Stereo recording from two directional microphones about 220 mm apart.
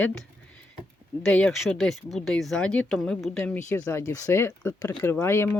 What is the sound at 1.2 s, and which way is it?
Speech, 5° left (ahead or behind).